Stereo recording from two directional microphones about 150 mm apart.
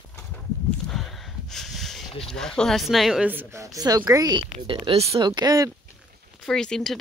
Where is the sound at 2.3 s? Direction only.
5° left (ahead or behind); by 4.4 s 25° right (ahead or behind).